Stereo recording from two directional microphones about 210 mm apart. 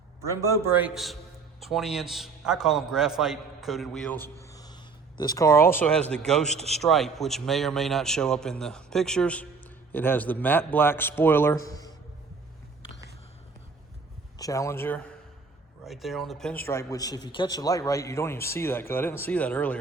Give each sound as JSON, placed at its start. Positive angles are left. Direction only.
{"t": 0.3, "sound": "a man's voice", "side_deg": -15}
{"t": 4.4, "sound": "speech", "side_deg": 15}
{"t": 6.4, "sound": "a man's voice", "side_deg": -30}
{"t": 6.8, "sound": "a man's voice", "side_deg": 0}
{"t": 14.3, "sound": "speech", "side_deg": 15}
{"t": 15.9, "sound": "speech", "side_deg": 0}